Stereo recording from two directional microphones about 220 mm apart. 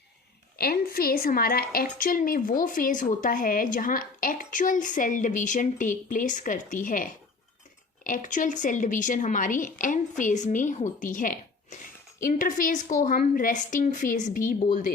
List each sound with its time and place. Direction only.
0.5 s a woman's voice: 45° left (ahead or behind)